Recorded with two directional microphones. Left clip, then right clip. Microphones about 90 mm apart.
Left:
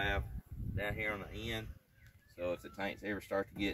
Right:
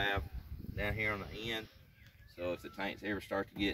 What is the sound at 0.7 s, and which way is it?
Speech, 5° left (ahead or behind).